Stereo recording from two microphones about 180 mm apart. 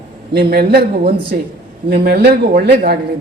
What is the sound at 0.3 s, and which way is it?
Speech, 55° right (ahead or behind).